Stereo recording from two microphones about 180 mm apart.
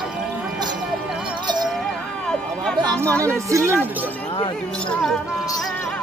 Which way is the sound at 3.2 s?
15° right (ahead or behind).